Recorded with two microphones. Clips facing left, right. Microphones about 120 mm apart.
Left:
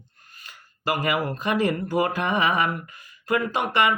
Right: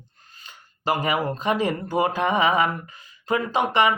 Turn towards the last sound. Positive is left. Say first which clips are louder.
# right 2 dB
turn(degrees=-20)  # may be behind; listen again after turning